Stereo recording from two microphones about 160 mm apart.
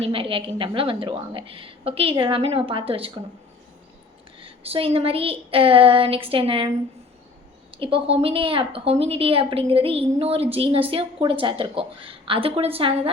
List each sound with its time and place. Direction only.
0.0 s a woman's voice: 35° right (ahead or behind)
4.4 s a woman's voice: 35° right (ahead or behind)
7.8 s a woman's voice: 35° right (ahead or behind)